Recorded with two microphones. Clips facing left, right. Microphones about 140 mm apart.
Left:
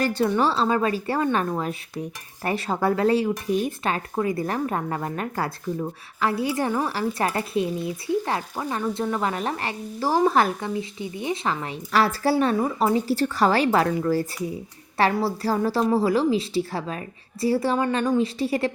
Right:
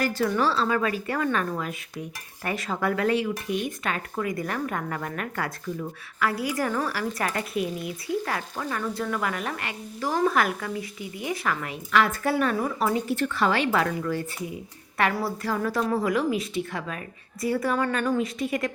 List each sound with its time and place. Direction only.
0.0 s a woman's voice: 25° left (ahead or behind)